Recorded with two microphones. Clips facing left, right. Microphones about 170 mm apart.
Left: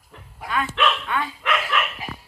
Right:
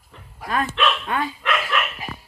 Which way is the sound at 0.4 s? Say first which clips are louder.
Right 1 dB; 40° right (ahead or behind).